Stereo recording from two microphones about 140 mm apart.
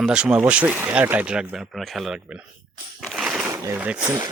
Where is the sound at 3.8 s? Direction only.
10° right (ahead or behind).